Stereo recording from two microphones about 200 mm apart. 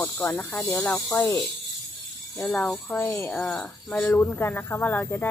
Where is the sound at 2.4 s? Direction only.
5° left (ahead or behind).